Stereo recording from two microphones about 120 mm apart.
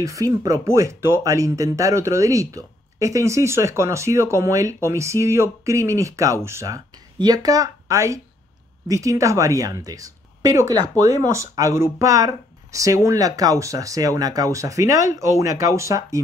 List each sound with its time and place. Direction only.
0.0 s speech: 25° right (ahead or behind)